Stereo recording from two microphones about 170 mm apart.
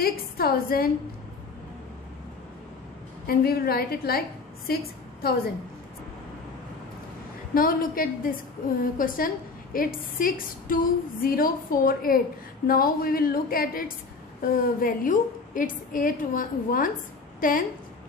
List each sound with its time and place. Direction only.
0.0 s a woman's voice: 60° left (ahead or behind)
3.3 s a woman's voice: 60° left (ahead or behind)
7.5 s a woman's voice: 55° left (ahead or behind)